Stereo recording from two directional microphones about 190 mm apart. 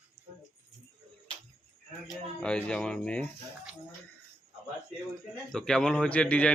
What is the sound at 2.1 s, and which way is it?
A man's voice, 5° left (ahead or behind).